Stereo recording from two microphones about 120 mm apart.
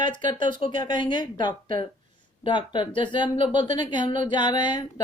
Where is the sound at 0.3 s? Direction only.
40° left (ahead or behind).